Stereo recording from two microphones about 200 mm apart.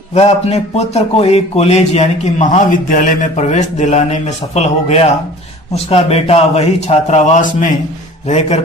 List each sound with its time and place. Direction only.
0.1 s speech: 35° left (ahead or behind)